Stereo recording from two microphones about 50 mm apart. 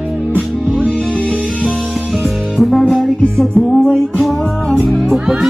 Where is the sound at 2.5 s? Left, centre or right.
Centre.